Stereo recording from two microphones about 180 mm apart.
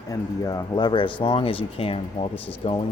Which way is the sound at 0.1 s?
20° left (ahead or behind).